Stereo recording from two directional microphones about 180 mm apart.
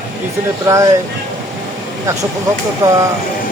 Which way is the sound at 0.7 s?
15° right (ahead or behind).